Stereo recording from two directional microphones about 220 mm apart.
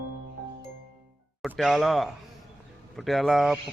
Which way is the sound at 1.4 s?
Centre (ahead or behind).